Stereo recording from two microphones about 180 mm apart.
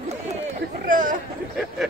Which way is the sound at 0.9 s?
50° right (ahead or behind).